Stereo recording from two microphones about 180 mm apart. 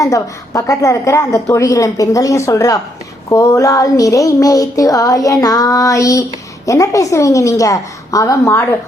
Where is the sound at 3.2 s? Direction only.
15° left (ahead or behind).